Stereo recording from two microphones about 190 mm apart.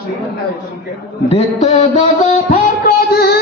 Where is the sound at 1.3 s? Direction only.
35° left (ahead or behind).